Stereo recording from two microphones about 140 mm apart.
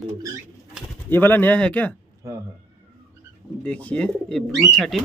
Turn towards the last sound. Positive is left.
turn(degrees=0)  # may be behind; listen again after turning